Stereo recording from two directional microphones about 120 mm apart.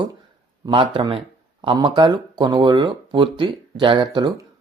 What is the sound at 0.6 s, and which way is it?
Speech, 45° right (ahead or behind).